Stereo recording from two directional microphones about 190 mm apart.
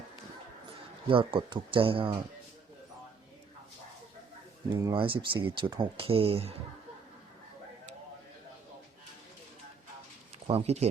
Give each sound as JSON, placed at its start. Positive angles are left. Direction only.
{"t": 1.0, "sound": "speech", "side_deg": -25}
{"t": 4.7, "sound": "speech", "side_deg": -20}
{"t": 10.4, "sound": "speech", "side_deg": -30}